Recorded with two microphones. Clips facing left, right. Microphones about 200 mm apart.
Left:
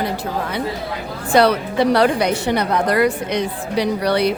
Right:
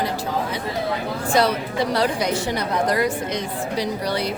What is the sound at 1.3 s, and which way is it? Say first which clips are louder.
A woman's voice: left 6 dB; 65° left (ahead or behind).